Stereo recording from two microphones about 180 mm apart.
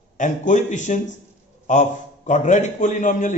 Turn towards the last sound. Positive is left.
turn(degrees=45)  # may be behind; listen again after turning